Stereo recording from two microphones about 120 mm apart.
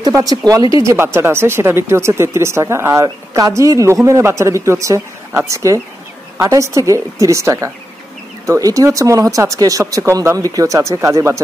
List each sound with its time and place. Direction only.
0.0 s speech: 30° right (ahead or behind)
0.8 s speech: 20° right (ahead or behind)